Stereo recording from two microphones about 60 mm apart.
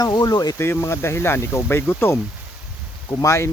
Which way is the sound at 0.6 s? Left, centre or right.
Left.